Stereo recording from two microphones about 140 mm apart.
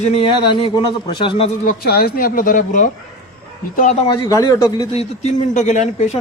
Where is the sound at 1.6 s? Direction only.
90° left; by 2.9 s 65° left (ahead or behind).